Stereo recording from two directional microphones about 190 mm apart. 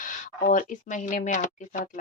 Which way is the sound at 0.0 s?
45° left (ahead or behind).